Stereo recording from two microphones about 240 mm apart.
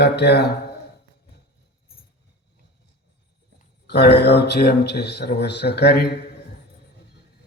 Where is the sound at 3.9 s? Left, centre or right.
Left.